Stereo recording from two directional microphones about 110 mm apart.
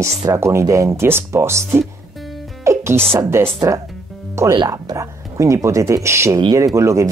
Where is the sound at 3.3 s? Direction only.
25° right (ahead or behind).